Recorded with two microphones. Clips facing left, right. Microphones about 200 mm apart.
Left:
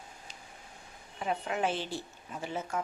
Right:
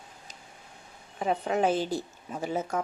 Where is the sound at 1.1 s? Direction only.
40° right (ahead or behind).